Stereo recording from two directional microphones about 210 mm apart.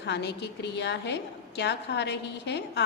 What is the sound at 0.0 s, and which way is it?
A woman's voice, 55° left (ahead or behind).